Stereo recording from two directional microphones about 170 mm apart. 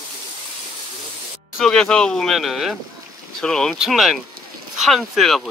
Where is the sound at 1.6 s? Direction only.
5° left (ahead or behind).